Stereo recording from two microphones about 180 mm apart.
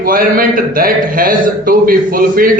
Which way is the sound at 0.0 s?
50° right (ahead or behind).